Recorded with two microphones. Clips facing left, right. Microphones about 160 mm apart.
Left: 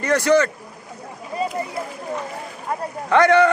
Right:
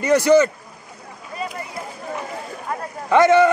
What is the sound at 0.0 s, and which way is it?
Speech, 20° right (ahead or behind).